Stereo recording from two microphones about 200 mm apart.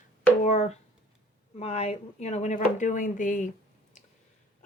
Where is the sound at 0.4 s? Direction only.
35° left (ahead or behind).